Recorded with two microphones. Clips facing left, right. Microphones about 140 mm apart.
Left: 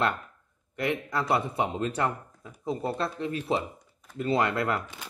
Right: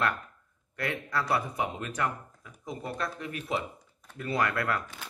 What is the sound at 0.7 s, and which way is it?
A man's voice, 20° left (ahead or behind).